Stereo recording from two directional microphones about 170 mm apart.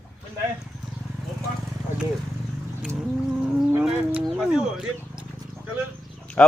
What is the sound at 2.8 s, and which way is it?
Livestock, 5° right (ahead or behind).